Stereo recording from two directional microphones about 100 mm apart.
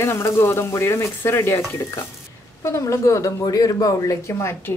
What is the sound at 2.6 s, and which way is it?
Speech, 30° left (ahead or behind).